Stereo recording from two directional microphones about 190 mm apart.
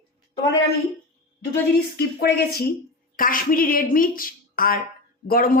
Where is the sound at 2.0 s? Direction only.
55° left (ahead or behind).